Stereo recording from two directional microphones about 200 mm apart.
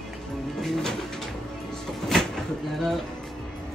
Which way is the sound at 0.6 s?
Centre (ahead or behind).